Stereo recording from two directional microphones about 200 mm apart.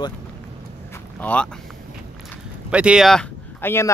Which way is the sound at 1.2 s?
5° left (ahead or behind).